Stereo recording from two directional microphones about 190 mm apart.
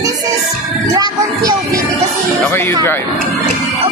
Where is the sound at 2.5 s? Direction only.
10° left (ahead or behind).